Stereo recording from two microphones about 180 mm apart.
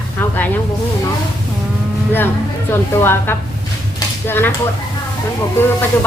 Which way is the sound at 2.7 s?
15° left (ahead or behind).